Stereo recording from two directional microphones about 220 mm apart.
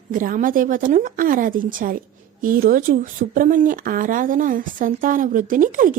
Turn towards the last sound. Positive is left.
turn(degrees=-35)  # may be behind; listen again after turning